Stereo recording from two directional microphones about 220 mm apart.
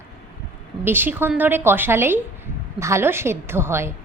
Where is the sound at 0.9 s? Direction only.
10° right (ahead or behind).